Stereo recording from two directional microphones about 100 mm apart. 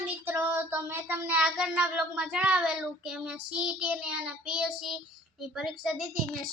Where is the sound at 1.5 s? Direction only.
10° right (ahead or behind).